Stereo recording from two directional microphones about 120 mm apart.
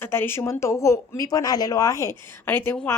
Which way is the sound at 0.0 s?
20° left (ahead or behind).